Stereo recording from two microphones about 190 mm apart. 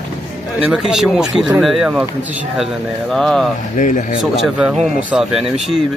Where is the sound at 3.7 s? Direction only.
40° left (ahead or behind).